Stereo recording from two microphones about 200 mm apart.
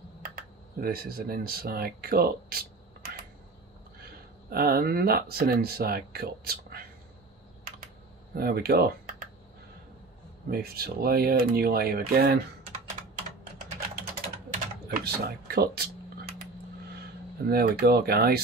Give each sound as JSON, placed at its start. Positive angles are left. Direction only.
{"t": 0.2, "sound": "speech", "side_deg": -45}
{"t": 4.5, "sound": "speech", "side_deg": -50}
{"t": 8.4, "sound": "speech", "side_deg": -50}
{"t": 10.5, "sound": "speech", "side_deg": -50}
{"t": 14.9, "sound": "a sound", "side_deg": -50}
{"t": 17.5, "sound": "speech", "side_deg": -50}